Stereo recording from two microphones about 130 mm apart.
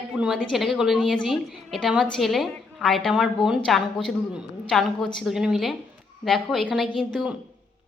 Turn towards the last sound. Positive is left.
turn(degrees=0)  # may be behind; listen again after turning